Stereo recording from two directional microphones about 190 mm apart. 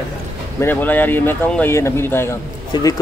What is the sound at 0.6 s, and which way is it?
Speech, 10° left (ahead or behind).